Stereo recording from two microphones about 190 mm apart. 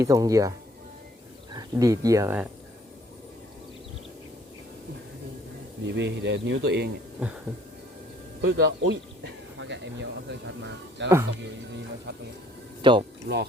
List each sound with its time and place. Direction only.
0.0 s speech: 15° right (ahead or behind)
1.5 s speech: 20° right (ahead or behind)
5.8 s speech: 65° right (ahead or behind)
8.4 s speech: 65° right (ahead or behind)
12.8 s speech: 25° right (ahead or behind)
13.2 s speech: 60° right (ahead or behind)